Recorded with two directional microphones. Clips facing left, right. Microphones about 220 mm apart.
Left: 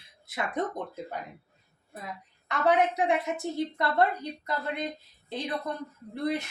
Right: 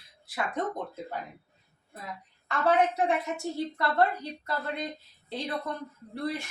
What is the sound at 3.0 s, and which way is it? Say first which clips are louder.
Speech: left 1 dB; 20° left (ahead or behind).